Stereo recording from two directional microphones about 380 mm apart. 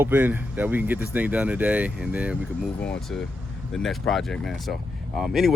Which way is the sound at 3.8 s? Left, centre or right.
Centre.